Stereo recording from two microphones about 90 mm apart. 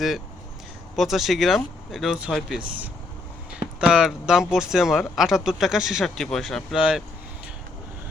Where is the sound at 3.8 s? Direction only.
5° right (ahead or behind).